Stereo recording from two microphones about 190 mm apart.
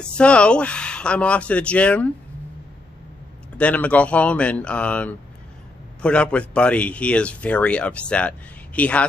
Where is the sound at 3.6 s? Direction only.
5° left (ahead or behind).